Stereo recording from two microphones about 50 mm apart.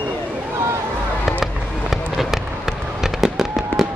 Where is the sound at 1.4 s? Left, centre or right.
Centre.